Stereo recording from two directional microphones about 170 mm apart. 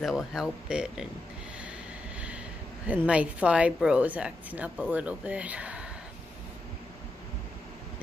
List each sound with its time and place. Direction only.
0.0 s speech: centre (ahead or behind)
2.1 s a sound: 5° right (ahead or behind)
2.9 s a woman's voice: 10° right (ahead or behind)